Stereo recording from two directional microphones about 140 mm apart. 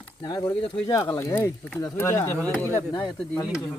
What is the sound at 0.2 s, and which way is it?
Speech, 25° left (ahead or behind).